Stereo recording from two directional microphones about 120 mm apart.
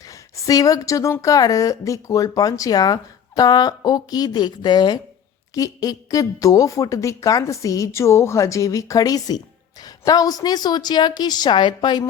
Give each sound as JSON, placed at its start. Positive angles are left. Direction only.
{"t": 0.0, "sound": "a woman's voice", "side_deg": 30}